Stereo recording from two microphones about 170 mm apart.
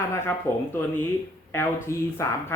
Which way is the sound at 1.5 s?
15° left (ahead or behind).